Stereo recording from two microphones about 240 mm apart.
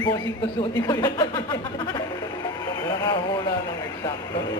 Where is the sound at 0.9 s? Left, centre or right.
Centre.